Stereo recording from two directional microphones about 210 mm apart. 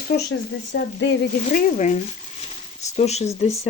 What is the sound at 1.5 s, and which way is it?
Speech, 35° left (ahead or behind).